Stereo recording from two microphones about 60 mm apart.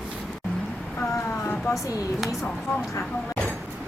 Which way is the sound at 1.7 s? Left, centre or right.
Left.